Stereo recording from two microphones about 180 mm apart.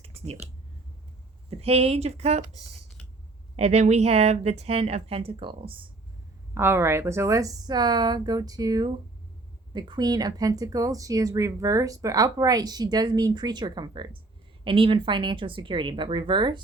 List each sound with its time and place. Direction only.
0.0 s clicking: 35° right (ahead or behind)
1.5 s speech: 35° right (ahead or behind)
3.5 s speech: 35° right (ahead or behind)
6.5 s speech: 15° right (ahead or behind)